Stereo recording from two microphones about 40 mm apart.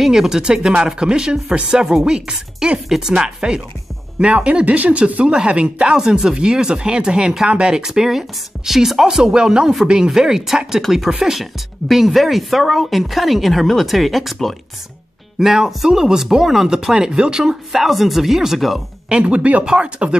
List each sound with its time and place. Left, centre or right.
0.0 s speech: centre; by 5.9 s right
5.9 s speech: centre
9.0 s speech: centre
17.7 s speech: centre
19.0 s speech: right
19.6 s speech: centre